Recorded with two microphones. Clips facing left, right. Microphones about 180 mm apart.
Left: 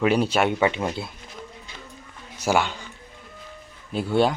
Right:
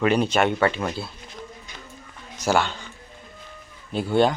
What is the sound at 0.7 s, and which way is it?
Speech, 20° left (ahead or behind).